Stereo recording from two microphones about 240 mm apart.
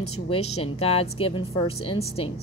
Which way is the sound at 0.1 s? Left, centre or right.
Left.